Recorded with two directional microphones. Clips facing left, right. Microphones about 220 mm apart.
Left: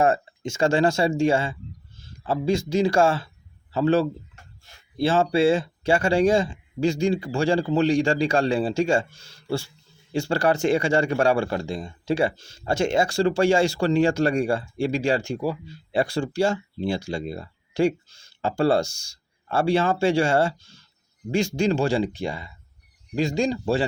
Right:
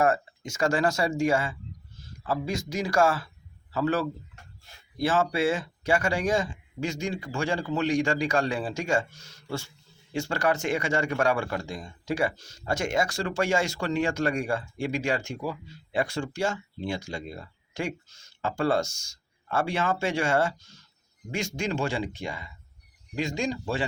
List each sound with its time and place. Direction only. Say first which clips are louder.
0.0 s speech: left 3 dB; 25° left (ahead or behind)